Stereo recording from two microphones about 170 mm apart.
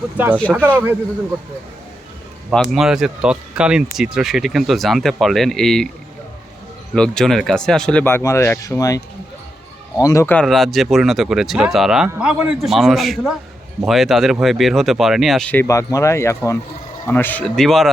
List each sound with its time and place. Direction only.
0.5 s speech: 5° right (ahead or behind)
2.5 s speech: 5° right (ahead or behind)
6.9 s speech: 5° left (ahead or behind); by 9.0 s 20° left (ahead or behind)
10.0 s speech: 20° left (ahead or behind)
10.3 s speech: centre (ahead or behind)